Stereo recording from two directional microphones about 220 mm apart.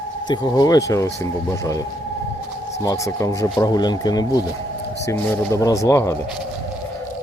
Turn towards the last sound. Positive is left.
turn(degrees=10)  # may be behind; listen again after turning